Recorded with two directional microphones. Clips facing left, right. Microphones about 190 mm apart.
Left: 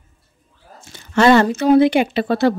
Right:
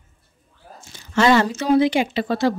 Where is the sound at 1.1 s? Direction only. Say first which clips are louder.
Left 4 dB; 55° left (ahead or behind).